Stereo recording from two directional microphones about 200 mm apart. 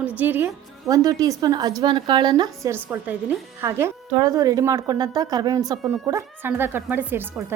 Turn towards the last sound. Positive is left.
turn(degrees=-10)  # may be behind; listen again after turning